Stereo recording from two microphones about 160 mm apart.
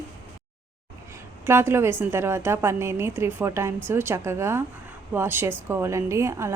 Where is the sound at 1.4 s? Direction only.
15° right (ahead or behind).